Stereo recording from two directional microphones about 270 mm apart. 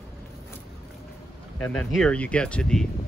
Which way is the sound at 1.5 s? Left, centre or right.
Centre.